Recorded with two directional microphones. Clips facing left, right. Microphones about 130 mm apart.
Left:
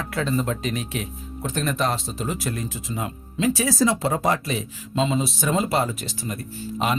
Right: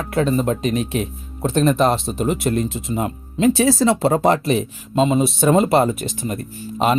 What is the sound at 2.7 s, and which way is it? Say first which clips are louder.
Speech: right 6 dB; 25° right (ahead or behind).